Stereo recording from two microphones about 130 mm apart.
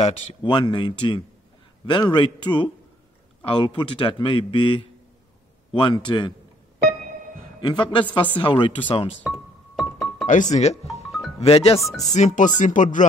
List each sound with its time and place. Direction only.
0.4 s a man's voice: 35° left (ahead or behind)
7.6 s a man's voice: 40° left (ahead or behind)
9.8 s music: centre (ahead or behind)
10.2 s speech: 70° left (ahead or behind)
10.9 s music: centre (ahead or behind)
11.3 s speech: 50° left (ahead or behind)
12.1 s speech: 65° left (ahead or behind)
12.5 s speech: 75° left (ahead or behind)